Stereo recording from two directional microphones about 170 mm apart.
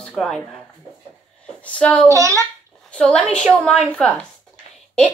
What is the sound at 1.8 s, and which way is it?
Speech, 5° left (ahead or behind).